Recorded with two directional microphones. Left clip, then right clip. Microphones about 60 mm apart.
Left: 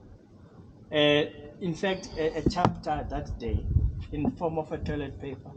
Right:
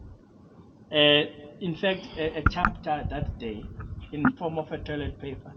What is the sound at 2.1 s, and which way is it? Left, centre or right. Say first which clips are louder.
Speech: even; centre.